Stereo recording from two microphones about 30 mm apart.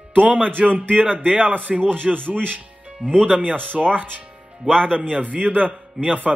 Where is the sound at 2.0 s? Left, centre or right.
Right.